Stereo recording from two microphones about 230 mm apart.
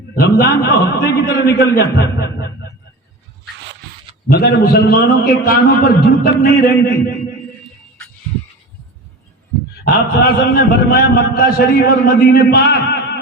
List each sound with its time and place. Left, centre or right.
0.2 s a man's voice: left
4.3 s a man's voice: left
9.8 s a man's voice: left